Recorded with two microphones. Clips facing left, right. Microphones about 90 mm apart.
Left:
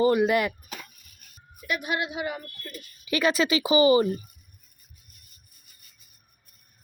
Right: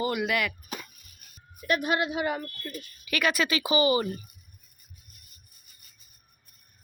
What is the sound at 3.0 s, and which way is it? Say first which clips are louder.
Speech: left 3 dB; 25° left (ahead or behind).